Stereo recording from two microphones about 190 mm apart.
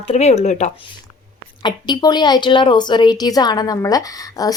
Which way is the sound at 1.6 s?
20° left (ahead or behind).